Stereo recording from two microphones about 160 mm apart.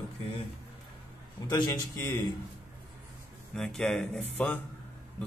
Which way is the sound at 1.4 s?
25° left (ahead or behind).